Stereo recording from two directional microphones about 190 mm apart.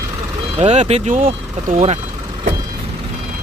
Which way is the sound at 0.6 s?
35° right (ahead or behind).